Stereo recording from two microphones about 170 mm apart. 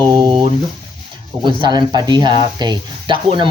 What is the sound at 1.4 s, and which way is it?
Speech, 25° right (ahead or behind).